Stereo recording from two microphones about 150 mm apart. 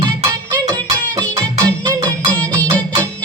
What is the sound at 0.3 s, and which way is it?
Music, 20° right (ahead or behind).